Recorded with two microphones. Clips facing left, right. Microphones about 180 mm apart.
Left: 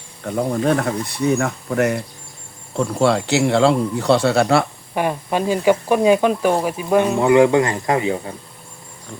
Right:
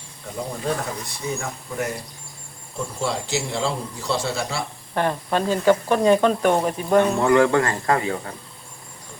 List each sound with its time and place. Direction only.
0.3 s speech: 65° left (ahead or behind)
4.9 s speech: 10° left (ahead or behind)